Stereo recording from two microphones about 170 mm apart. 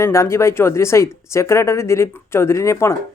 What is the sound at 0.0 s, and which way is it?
Speech, 15° left (ahead or behind).